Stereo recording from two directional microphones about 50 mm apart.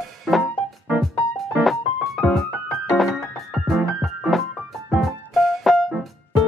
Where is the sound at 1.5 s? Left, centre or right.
Centre.